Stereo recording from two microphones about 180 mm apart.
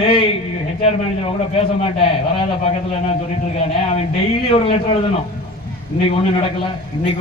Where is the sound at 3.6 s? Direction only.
35° left (ahead or behind).